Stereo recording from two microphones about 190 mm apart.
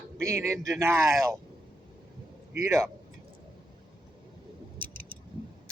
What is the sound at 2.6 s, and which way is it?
Speech, 15° right (ahead or behind).